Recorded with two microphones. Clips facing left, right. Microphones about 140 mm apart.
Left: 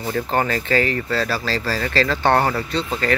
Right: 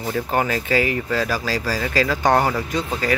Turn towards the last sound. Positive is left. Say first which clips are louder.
# left 1 dB
turn(degrees=-5)  # may be behind; listen again after turning